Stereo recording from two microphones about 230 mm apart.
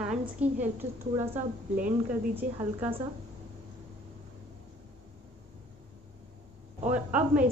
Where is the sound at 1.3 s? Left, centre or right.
Right.